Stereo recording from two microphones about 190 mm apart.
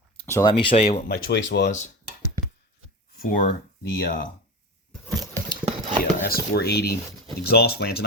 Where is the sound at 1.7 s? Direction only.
40° left (ahead or behind).